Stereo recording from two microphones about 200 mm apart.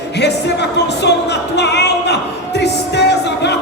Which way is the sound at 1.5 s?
55° left (ahead or behind).